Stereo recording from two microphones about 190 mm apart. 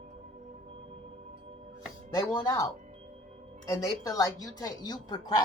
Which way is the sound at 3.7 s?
20° left (ahead or behind).